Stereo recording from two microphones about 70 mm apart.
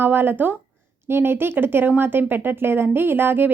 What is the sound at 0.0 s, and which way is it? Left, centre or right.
Speech, right.